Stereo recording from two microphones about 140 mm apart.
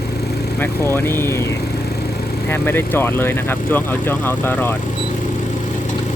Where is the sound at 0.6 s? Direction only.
15° left (ahead or behind).